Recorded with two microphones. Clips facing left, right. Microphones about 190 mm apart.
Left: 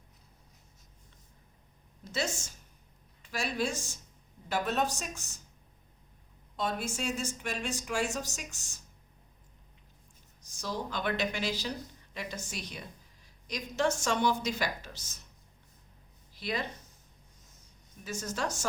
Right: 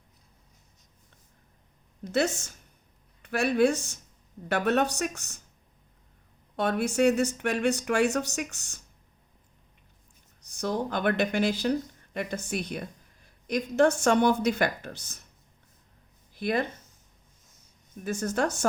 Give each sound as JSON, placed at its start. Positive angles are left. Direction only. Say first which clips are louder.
{"t": 2.1, "sound": "speech", "louder": "right 8 dB", "side_deg": -60}
{"t": 6.6, "sound": "speech", "louder": "right 10 dB", "side_deg": -65}
{"t": 10.4, "sound": "speech", "louder": "right 7 dB", "side_deg": -60}
{"t": 16.3, "sound": "speech", "louder": "right 8 dB", "side_deg": -55}
{"t": 18.0, "sound": "speech", "louder": "right 8 dB", "side_deg": -55}